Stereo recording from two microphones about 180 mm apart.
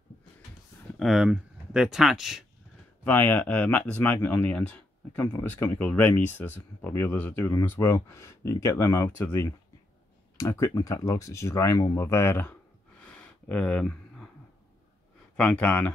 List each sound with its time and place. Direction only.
0.9 s speech: centre (ahead or behind)
3.0 s speech: 10° left (ahead or behind)
13.0 s a sound: 5° left (ahead or behind)
15.3 s speech: 10° left (ahead or behind)